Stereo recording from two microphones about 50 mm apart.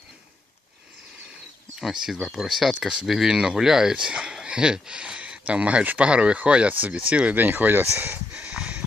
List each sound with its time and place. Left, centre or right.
1.8 s speech: centre; by 8.2 s right
8.3 s snort: right